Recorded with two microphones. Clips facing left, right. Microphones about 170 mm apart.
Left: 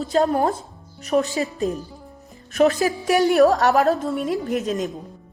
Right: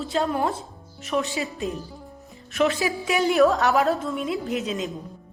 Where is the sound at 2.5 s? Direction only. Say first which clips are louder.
Left 5 dB; 40° left (ahead or behind).